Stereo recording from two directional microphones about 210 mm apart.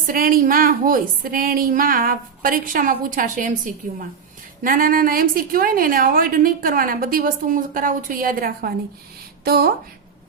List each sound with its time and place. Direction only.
0.1 s a woman's voice: 45° right (ahead or behind)